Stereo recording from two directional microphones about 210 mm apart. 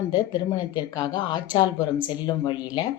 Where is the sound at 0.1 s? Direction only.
20° left (ahead or behind).